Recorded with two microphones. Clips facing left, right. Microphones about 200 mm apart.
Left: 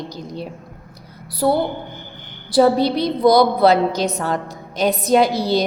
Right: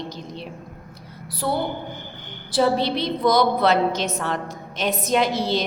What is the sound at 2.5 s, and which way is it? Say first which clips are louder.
A woman's voice: left 6 dB; 40° left (ahead or behind).